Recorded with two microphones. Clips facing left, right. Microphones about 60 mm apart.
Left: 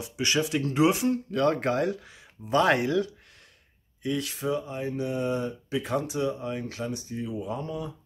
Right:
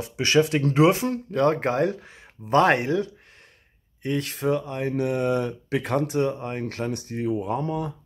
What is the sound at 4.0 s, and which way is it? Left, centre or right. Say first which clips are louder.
Speech: right 3 dB; right.